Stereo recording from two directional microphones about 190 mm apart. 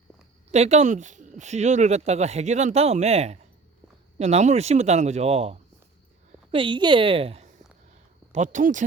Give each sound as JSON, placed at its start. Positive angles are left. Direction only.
{"t": 0.5, "sound": "a woman's voice", "side_deg": -35}